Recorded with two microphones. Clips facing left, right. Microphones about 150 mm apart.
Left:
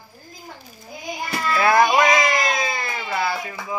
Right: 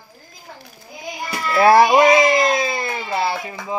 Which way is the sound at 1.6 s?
30° right (ahead or behind).